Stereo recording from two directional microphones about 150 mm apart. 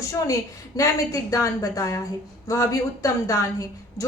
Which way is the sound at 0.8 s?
25° left (ahead or behind).